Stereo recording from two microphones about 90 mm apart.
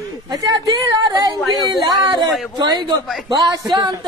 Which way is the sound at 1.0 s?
50° right (ahead or behind).